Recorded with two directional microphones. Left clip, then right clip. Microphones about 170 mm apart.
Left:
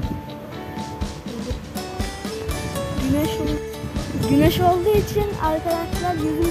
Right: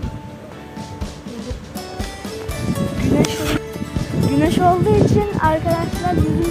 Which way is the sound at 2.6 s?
Centre (ahead or behind).